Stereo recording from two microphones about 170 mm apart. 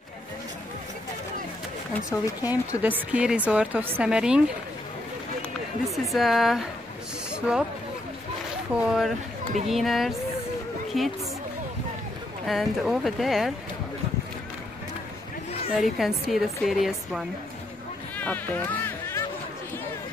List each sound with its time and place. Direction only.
2.0 s speech: 20° left (ahead or behind)
2.8 s speech: 10° right (ahead or behind)
5.9 s a woman's voice: centre (ahead or behind)
7.2 s a sound: 5° right (ahead or behind)
8.7 s a woman's voice: 5° right (ahead or behind)
12.4 s a woman's voice: centre (ahead or behind)
15.7 s a woman's voice: centre (ahead or behind)
18.1 s music: 10° left (ahead or behind)